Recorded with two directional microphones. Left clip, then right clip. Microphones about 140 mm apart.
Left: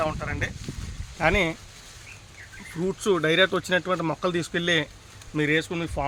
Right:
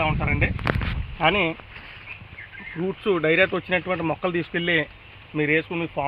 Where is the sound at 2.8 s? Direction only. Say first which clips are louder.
Right 1 dB; 40° left (ahead or behind); by 5.8 s 20° left (ahead or behind).